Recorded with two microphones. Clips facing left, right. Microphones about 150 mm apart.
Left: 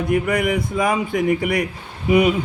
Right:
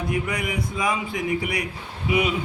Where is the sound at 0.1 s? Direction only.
55° left (ahead or behind).